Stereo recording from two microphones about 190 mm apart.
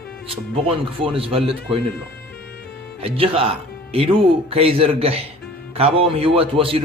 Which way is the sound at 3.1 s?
30° right (ahead or behind).